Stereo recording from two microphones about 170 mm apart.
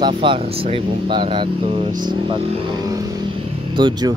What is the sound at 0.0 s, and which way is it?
Speech, 30° right (ahead or behind).